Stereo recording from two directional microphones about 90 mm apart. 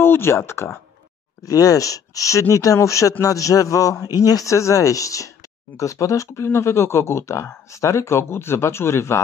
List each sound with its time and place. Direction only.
0.0 s speech: 25° left (ahead or behind)
1.4 s a man's voice: 40° left (ahead or behind)